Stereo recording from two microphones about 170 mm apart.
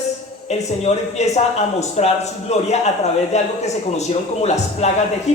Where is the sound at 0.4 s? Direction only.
40° left (ahead or behind).